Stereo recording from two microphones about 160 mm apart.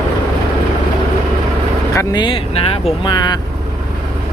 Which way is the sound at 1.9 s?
25° left (ahead or behind).